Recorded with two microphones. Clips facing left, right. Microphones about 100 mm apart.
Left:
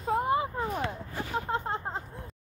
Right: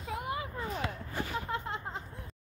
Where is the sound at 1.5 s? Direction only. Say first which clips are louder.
Left 5 dB; 40° left (ahead or behind).